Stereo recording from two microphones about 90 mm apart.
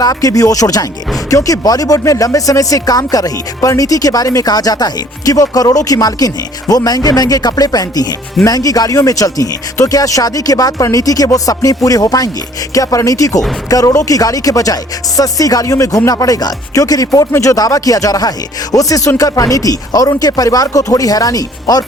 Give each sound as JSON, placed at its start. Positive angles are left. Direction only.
{"t": 0.0, "sound": "speech", "side_deg": 45}